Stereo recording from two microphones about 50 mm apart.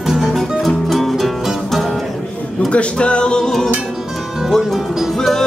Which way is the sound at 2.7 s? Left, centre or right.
Left.